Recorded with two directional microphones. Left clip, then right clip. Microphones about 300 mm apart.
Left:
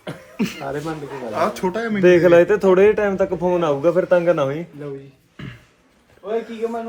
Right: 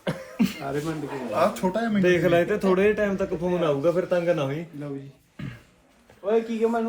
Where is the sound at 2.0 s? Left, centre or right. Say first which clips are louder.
Left 9 dB; centre.